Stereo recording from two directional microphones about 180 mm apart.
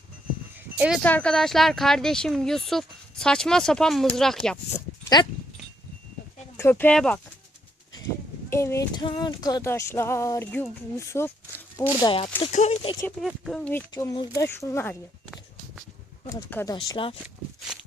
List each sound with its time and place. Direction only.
1.0 s speech: 5° left (ahead or behind)
4.7 s speech: 20° left (ahead or behind)
6.6 s a sound: 10° left (ahead or behind)
8.4 s a sound: 15° left (ahead or behind)
12.0 s speech: 30° left (ahead or behind)
13.1 s speech: centre (ahead or behind)
13.9 s a sound: 20° left (ahead or behind)
16.2 s speech: 10° left (ahead or behind)
16.7 s speech: 30° left (ahead or behind)
17.7 s walk: 5° right (ahead or behind)